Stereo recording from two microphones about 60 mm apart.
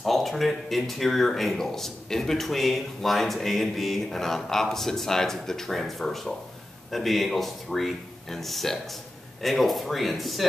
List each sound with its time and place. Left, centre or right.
0.0 s speech: centre